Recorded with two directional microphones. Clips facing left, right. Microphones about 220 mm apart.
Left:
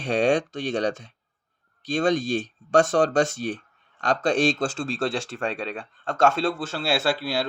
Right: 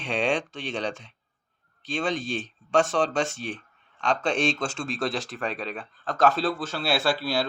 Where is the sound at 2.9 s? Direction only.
45° left (ahead or behind).